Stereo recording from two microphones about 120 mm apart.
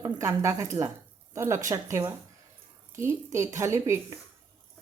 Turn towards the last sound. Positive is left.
turn(degrees=-25)  # may be behind; listen again after turning